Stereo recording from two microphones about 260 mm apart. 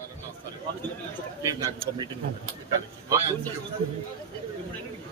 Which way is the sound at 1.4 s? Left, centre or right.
Centre.